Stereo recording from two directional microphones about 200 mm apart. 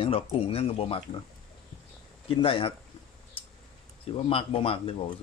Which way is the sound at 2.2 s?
25° left (ahead or behind).